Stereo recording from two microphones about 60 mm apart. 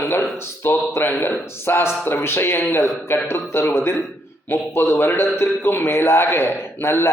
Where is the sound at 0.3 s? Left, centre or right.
Left.